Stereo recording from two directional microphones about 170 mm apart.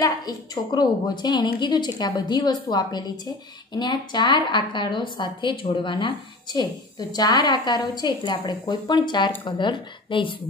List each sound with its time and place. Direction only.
0.0 s a woman's voice: 20° left (ahead or behind)